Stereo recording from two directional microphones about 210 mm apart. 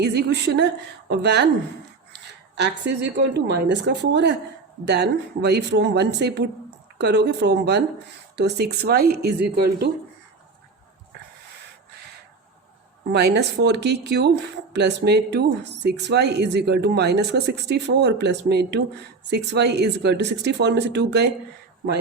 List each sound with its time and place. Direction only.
0.0 s speech: 50° right (ahead or behind)
13.1 s speech: 50° right (ahead or behind)